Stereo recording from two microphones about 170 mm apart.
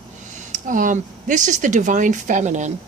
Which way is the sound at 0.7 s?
50° right (ahead or behind).